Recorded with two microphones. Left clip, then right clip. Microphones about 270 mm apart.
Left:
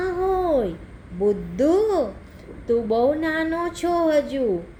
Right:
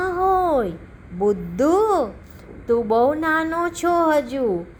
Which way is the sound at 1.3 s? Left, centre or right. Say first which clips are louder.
Right 1 dB; centre.